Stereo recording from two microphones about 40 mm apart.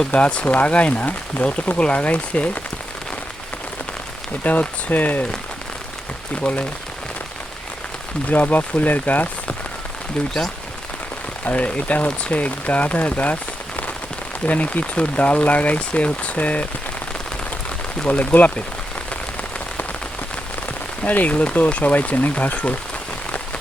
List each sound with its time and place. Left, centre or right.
0.1 s speech: left
4.4 s speech: left
6.4 s speech: left
8.3 s speech: left
11.5 s speech: left
18.1 s speech: left
21.0 s speech: left